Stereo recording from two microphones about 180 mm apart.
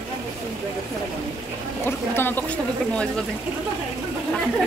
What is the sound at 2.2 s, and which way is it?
Speech, 10° left (ahead or behind).